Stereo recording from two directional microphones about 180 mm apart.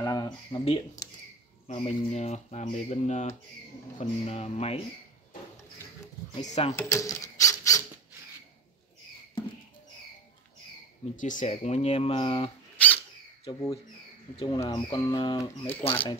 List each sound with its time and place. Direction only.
0.0 s speech: 20° left (ahead or behind)
1.7 s speech: 40° left (ahead or behind)
6.3 s speech: 35° left (ahead or behind)
6.7 s speech: 15° left (ahead or behind)
11.1 s speech: 45° left (ahead or behind)
12.7 s a sound: 10° left (ahead or behind)
13.5 s speech: 20° left (ahead or behind)